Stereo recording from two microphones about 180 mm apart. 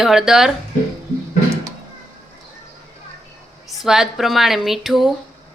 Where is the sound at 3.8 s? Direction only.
Centre (ahead or behind).